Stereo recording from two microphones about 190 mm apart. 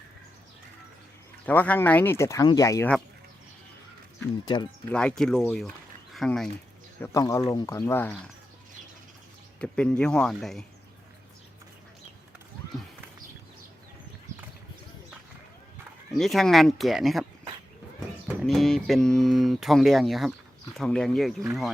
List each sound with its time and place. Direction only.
1.5 s speech: 10° left (ahead or behind)
4.4 s speech: 25° left (ahead or behind)
4.9 s speech: 5° left (ahead or behind)
7.0 s speech: 15° left (ahead or behind)
9.6 s speech: 5° left (ahead or behind)
16.1 s speech: centre (ahead or behind)
18.3 s speech: centre (ahead or behind)